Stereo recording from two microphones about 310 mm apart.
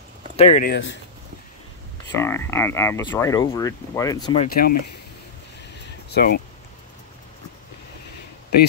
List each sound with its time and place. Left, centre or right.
0.4 s speech: left
2.1 s speech: centre
4.5 s speech: left
6.0 s speech: left